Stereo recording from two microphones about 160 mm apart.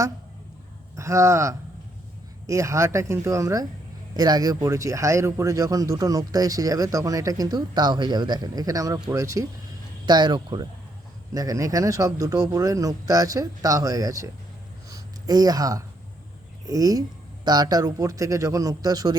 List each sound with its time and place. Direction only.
0.9 s speech: 20° right (ahead or behind)
14.8 s a sound: 25° right (ahead or behind)
16.6 s speech: 20° right (ahead or behind)